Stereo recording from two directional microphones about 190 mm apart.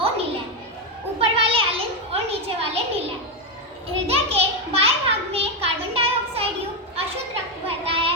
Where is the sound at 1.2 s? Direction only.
30° right (ahead or behind).